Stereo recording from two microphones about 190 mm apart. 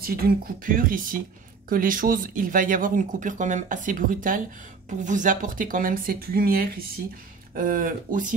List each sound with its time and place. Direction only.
0.0 s speech: 50° right (ahead or behind)